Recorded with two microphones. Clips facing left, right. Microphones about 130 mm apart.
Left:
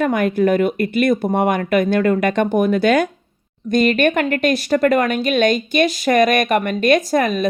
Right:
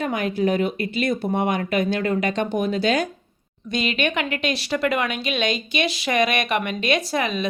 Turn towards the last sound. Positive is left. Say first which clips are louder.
# left 6 dB
turn(degrees=45)  # may be behind; listen again after turning